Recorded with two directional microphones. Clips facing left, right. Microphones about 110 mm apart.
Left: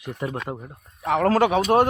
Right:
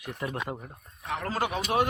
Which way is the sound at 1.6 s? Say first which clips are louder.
Left 8 dB; 45° left (ahead or behind).